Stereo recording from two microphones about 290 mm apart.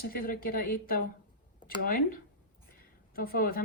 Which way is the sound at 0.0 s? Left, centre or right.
Left.